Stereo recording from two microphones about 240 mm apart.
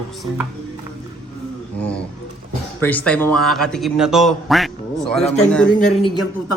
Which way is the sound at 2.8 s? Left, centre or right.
Centre.